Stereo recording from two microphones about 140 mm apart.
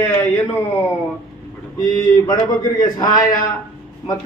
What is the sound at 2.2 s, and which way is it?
A man's voice, 25° left (ahead or behind).